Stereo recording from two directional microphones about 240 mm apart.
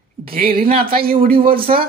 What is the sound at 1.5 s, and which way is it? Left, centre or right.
Speech, right.